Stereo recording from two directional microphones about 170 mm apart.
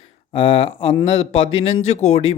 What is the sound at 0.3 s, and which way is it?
A man's voice, 30° left (ahead or behind).